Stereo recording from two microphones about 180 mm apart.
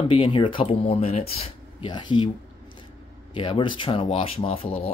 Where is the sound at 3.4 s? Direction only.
30° left (ahead or behind).